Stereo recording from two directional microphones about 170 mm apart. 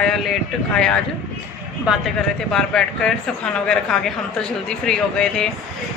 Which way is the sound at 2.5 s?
5° left (ahead or behind).